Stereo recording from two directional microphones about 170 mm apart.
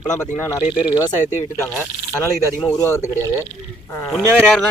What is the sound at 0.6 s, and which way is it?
Speech, 5° right (ahead or behind).